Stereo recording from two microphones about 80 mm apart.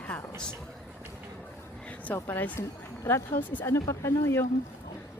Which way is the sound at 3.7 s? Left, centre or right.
Left.